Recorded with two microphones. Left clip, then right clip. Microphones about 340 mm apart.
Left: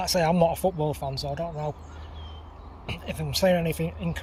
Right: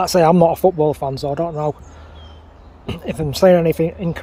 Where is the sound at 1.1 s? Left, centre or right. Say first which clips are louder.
Right 10 dB; centre.